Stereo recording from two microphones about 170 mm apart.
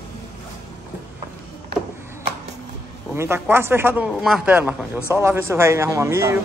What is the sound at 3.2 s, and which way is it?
Speech, 15° right (ahead or behind).